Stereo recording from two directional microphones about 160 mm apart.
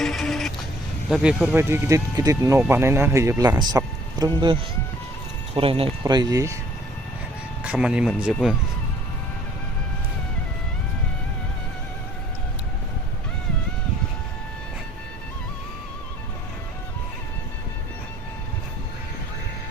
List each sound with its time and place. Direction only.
0.0 s vehicle: centre (ahead or behind)
1.1 s speech: 5° right (ahead or behind)
7.6 s speech: 5° right (ahead or behind)